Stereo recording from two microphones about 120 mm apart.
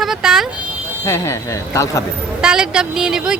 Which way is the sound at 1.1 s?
25° left (ahead or behind).